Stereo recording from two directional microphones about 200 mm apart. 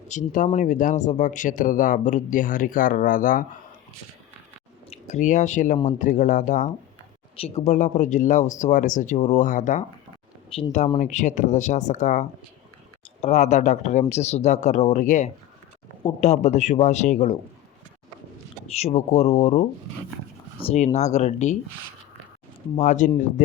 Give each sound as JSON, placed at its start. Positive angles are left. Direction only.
{"t": 0.1, "sound": "speech", "side_deg": 40}
{"t": 4.9, "sound": "speech", "side_deg": 35}
{"t": 7.3, "sound": "speech", "side_deg": 30}
{"t": 18.7, "sound": "speech", "side_deg": 30}
{"t": 22.7, "sound": "speech", "side_deg": 35}